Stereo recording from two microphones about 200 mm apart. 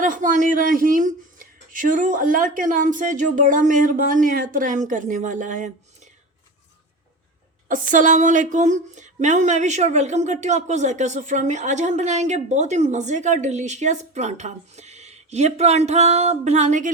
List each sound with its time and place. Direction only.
0.0 s speech: 40° right (ahead or behind)
7.7 s speech: 40° right (ahead or behind)